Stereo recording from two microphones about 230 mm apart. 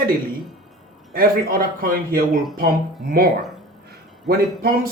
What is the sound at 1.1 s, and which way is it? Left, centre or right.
Speech, right.